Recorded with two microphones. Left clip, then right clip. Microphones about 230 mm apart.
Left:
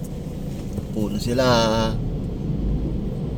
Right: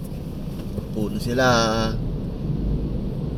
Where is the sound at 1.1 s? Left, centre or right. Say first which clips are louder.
Even; left.